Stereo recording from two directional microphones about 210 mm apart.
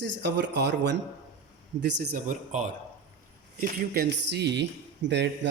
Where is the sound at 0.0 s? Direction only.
55° right (ahead or behind); by 2.6 s 35° right (ahead or behind).